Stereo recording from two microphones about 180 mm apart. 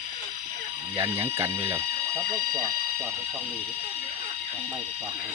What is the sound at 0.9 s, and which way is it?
Speech, 15° right (ahead or behind).